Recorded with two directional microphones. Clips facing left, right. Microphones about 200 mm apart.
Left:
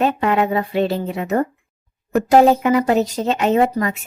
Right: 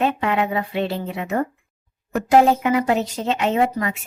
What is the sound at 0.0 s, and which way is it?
Speech, 40° left (ahead or behind).